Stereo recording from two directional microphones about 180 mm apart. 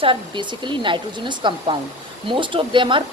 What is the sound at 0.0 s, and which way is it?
Speech, 30° right (ahead or behind).